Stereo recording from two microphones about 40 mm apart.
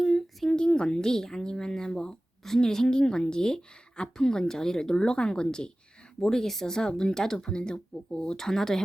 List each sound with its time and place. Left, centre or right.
0.0 s a sound: centre
0.5 s speech: left
8.4 s speech: centre